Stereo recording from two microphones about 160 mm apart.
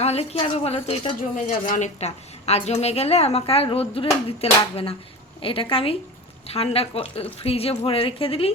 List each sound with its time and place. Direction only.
0.0 s a woman's voice: 40° left (ahead or behind)